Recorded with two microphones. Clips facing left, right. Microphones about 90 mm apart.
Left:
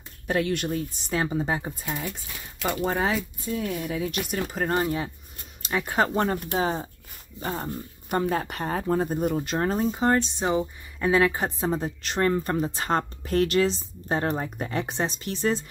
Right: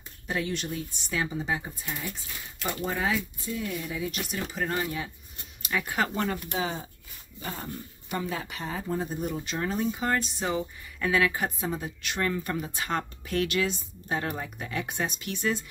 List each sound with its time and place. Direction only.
0.3 s a woman's voice: 60° left (ahead or behind); by 1.6 s 45° left (ahead or behind)
2.6 s speech: 90° left
2.9 s speech: 40° left (ahead or behind); by 4.2 s 60° left (ahead or behind)
4.3 s a woman's voice: 40° left (ahead or behind)
10.1 s a woman's voice: 25° left (ahead or behind)